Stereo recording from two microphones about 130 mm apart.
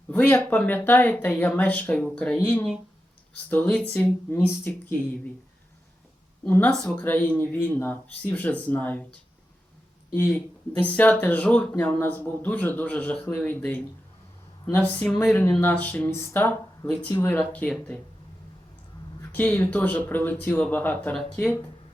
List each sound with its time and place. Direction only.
0.1 s speech: 15° left (ahead or behind)
6.4 s speech: 10° left (ahead or behind)
10.3 s speech: 10° left (ahead or behind)
19.2 s speech: 15° left (ahead or behind)